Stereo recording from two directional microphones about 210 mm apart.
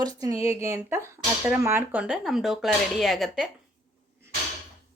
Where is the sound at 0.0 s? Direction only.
15° right (ahead or behind); by 3.5 s centre (ahead or behind).